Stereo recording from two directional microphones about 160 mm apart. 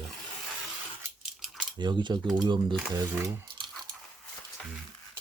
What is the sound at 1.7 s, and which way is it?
Speech, 30° right (ahead or behind).